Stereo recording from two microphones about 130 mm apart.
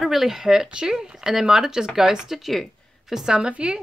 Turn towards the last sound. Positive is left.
turn(degrees=-10)  # may be behind; listen again after turning